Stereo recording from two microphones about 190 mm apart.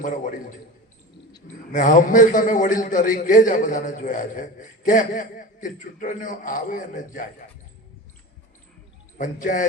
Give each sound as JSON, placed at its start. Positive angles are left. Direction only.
{"t": 0.0, "sound": "a man's voice", "side_deg": 45}
{"t": 1.7, "sound": "a man's voice", "side_deg": 45}
{"t": 9.1, "sound": "a man's voice", "side_deg": 45}